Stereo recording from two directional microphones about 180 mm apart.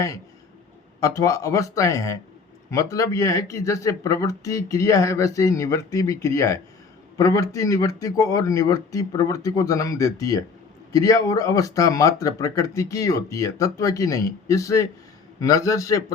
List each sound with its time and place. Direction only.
0.9 s speech: 20° left (ahead or behind)